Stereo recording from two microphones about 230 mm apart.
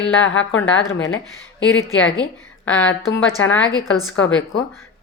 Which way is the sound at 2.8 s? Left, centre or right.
Left.